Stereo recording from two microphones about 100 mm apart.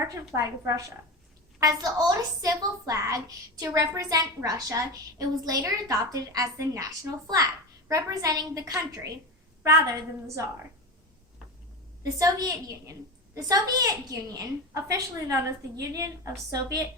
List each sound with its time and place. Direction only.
0.3 s a woman's voice: 35° right (ahead or behind)
12.2 s a woman's voice: 35° right (ahead or behind)